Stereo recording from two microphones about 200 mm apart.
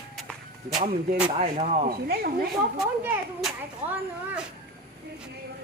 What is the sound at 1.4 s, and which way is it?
Speech, 30° right (ahead or behind).